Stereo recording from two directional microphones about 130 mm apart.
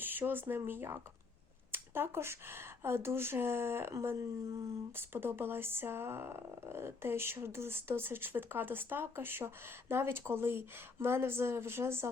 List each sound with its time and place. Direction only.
0.0 s speech: 15° right (ahead or behind)